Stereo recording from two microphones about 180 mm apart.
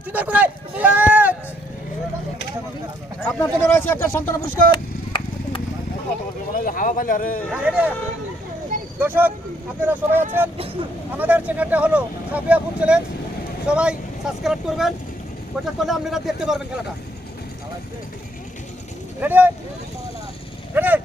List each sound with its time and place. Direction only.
0.1 s a sound: 10° right (ahead or behind)
3.2 s speech: 15° left (ahead or behind)
4.7 s a sound: 25° left (ahead or behind)
6.5 s speech: 50° left (ahead or behind)
7.5 s speech: 5° right (ahead or behind)
9.0 s speech: 10° right (ahead or behind)
19.2 s speech: 10° right (ahead or behind)
20.7 s livestock: 10° right (ahead or behind)